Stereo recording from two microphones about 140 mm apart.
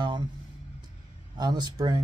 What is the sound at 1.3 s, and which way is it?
Speech, 30° right (ahead or behind).